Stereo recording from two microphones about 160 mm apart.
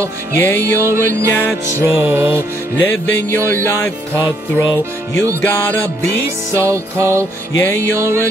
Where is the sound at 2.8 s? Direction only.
10° left (ahead or behind).